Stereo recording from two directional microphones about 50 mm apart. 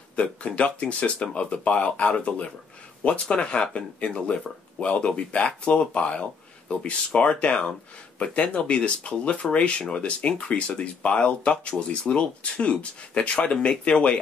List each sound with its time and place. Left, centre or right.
0.1 s speech: left